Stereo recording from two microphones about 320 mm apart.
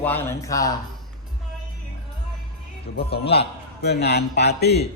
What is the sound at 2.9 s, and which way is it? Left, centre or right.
A man's voice, left.